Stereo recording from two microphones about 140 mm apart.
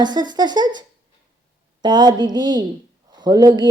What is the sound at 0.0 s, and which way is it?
A woman's voice, 30° right (ahead or behind).